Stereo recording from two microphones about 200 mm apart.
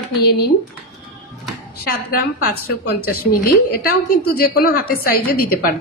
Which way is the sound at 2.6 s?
45° left (ahead or behind).